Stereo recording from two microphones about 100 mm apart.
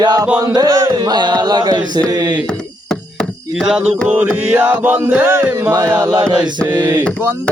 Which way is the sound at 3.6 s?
5° right (ahead or behind).